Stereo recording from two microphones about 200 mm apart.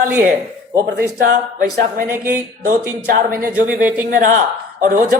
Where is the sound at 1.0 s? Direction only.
50° right (ahead or behind).